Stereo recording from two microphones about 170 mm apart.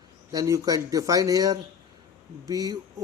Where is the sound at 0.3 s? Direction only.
20° right (ahead or behind).